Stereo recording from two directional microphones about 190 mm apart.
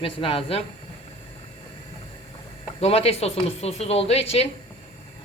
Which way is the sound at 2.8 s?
30° left (ahead or behind).